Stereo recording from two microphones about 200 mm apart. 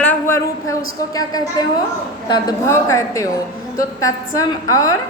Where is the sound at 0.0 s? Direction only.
10° left (ahead or behind).